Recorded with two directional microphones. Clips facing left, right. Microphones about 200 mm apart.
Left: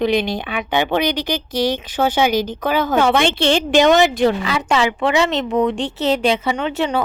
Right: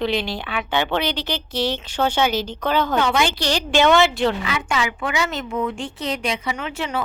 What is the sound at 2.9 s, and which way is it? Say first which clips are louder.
Speech: left 5 dB; 50° left (ahead or behind).